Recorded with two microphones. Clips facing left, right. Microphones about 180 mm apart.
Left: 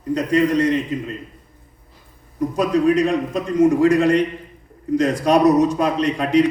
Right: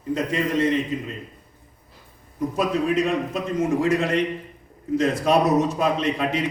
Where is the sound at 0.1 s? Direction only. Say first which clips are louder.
Left 6 dB; centre (ahead or behind).